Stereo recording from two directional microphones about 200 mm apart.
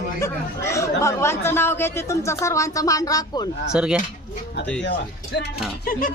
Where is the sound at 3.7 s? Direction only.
5° right (ahead or behind).